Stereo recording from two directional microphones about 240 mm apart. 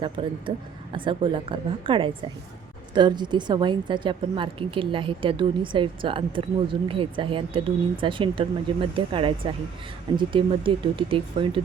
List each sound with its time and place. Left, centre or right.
0.0 s a woman's voice: right